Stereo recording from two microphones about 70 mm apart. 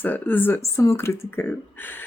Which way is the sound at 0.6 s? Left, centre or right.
Left.